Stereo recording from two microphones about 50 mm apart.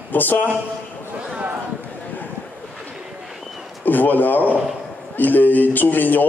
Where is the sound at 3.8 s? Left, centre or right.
Left.